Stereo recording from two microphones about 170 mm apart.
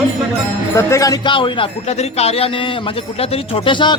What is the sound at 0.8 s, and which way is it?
A man's voice, 15° left (ahead or behind).